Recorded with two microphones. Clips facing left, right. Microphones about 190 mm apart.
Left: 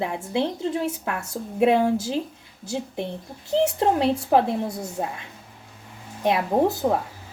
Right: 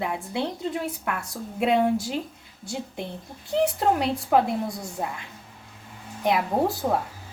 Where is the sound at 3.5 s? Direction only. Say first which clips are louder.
Left 2 dB; 25° left (ahead or behind).